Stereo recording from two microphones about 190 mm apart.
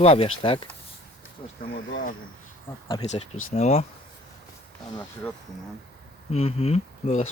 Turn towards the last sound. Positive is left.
turn(degrees=35)  # may be behind; listen again after turning